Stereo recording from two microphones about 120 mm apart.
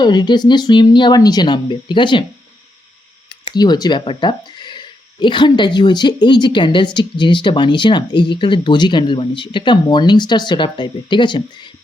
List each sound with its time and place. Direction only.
0.0 s speech: 35° left (ahead or behind)
3.2 s speech: 40° left (ahead or behind)